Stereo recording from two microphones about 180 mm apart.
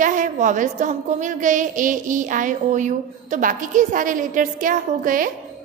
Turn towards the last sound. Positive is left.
turn(degrees=-50)  # may be behind; listen again after turning